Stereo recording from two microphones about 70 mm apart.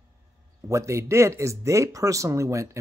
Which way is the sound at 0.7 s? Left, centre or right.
Right.